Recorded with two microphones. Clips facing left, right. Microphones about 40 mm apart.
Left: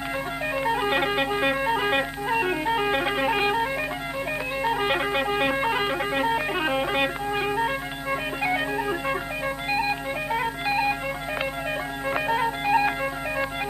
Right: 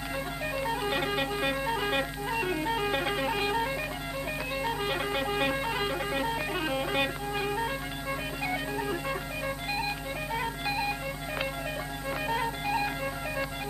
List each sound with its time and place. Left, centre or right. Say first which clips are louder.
0.6 s music: left 7 dB; left
4.6 s music: left 8 dB; left
12.3 s music: left 7 dB; left